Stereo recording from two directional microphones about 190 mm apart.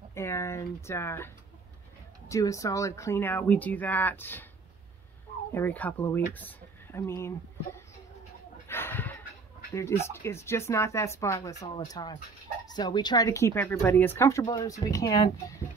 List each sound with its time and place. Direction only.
0.1 s speech: 15° left (ahead or behind)
5.5 s speech: 10° left (ahead or behind)
8.6 s a sound: 10° left (ahead or behind)
9.8 s speech: 15° left (ahead or behind)